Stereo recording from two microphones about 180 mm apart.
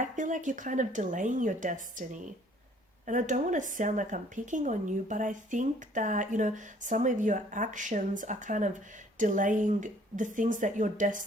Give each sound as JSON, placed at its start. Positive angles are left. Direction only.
{"t": 0.0, "sound": "speech", "side_deg": -45}
{"t": 3.1, "sound": "speech", "side_deg": -45}